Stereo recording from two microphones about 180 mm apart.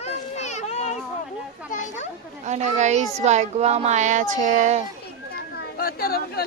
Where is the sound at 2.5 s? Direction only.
40° right (ahead or behind).